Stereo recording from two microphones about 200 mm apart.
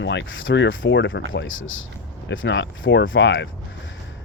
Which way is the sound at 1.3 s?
75° left (ahead or behind).